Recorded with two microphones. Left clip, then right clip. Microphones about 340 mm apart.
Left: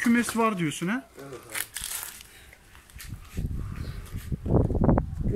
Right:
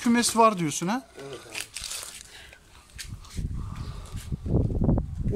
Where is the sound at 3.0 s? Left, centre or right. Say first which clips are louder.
Right 5 dB; right.